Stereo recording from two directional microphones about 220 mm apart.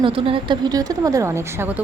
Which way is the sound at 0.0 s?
25° right (ahead or behind).